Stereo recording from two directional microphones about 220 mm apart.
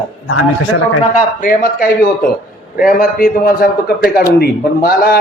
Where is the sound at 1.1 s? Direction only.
35° left (ahead or behind).